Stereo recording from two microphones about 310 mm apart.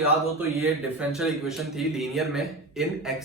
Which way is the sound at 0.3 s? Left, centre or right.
Centre.